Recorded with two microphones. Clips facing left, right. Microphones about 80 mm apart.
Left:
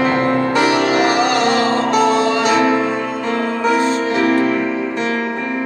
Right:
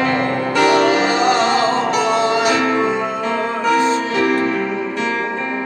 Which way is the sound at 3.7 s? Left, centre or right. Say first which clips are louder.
Even; left.